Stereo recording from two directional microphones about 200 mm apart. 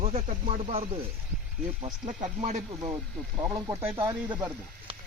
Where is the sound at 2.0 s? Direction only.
35° right (ahead or behind).